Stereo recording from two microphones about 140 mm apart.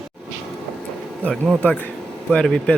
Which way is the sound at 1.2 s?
5° left (ahead or behind).